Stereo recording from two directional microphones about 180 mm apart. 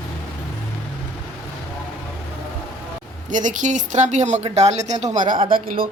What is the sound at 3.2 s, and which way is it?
A woman's voice, 45° right (ahead or behind).